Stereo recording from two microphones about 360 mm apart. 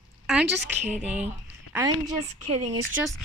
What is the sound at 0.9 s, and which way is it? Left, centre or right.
Speech, centre.